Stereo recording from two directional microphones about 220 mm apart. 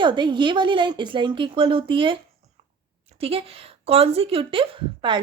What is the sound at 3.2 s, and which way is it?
A woman's voice, 25° right (ahead or behind).